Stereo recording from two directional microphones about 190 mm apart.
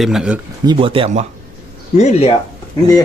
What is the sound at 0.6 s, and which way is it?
Speech, 25° right (ahead or behind).